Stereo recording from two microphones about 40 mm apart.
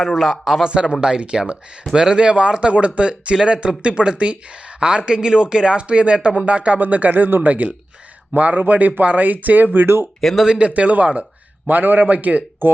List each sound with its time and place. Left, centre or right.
0.0 s speech: centre
0.7 s speech: right
6.7 s speech: right
7.4 s speech: right
9.8 s speech: right
10.3 s speech: centre
10.8 s speech: right
11.7 s speech: right